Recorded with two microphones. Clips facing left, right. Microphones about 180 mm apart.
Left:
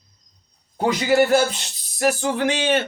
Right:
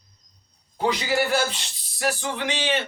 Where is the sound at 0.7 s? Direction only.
45° left (ahead or behind).